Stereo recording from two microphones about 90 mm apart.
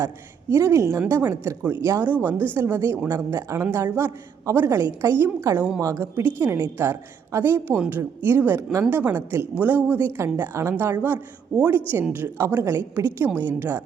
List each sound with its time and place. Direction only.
0.5 s a woman's voice: 35° right (ahead or behind)
7.7 s a woman's voice: 20° right (ahead or behind)